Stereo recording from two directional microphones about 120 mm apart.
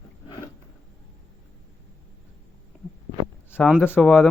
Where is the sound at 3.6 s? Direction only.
5° left (ahead or behind).